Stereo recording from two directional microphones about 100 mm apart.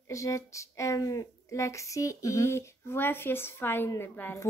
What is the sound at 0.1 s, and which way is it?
Speech, 30° left (ahead or behind).